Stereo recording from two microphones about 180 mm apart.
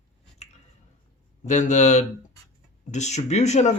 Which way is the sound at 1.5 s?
40° left (ahead or behind).